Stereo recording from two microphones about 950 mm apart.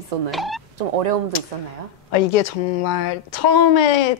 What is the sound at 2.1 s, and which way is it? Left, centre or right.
Speech, left.